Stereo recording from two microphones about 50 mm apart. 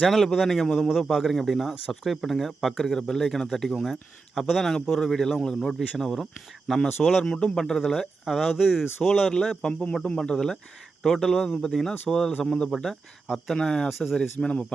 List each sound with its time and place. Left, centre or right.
0.1 s speech: centre
0.9 s speech: centre
7.3 s speech: centre
8.2 s speech: centre
9.4 s speech: centre
12.8 s speech: centre
14.4 s speech: left